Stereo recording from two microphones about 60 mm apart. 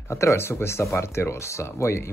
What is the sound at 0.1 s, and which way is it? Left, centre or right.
Speech, left.